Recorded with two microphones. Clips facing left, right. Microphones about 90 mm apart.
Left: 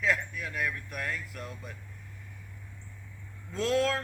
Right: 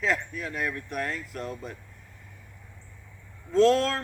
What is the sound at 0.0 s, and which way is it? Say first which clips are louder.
Speech: right 2 dB; 30° right (ahead or behind).